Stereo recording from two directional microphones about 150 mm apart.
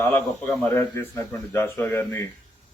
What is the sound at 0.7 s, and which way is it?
Speech, 20° left (ahead or behind).